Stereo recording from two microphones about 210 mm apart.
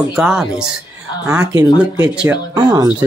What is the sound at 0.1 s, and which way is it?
Speech, 5° right (ahead or behind).